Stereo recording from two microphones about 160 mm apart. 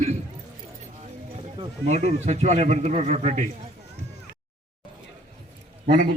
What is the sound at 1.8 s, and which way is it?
A man's voice, 45° right (ahead or behind).